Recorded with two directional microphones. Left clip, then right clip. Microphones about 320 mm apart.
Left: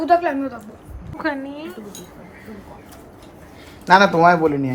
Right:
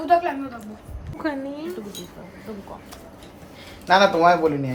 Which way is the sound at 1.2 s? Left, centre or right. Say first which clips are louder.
Left 3 dB; centre.